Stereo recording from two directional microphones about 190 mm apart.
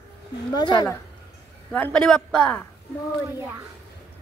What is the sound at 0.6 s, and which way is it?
Speech, 20° left (ahead or behind).